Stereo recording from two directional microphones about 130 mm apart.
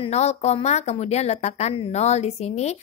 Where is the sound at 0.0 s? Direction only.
55° left (ahead or behind).